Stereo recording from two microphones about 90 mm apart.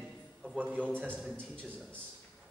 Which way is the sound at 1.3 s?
15° left (ahead or behind).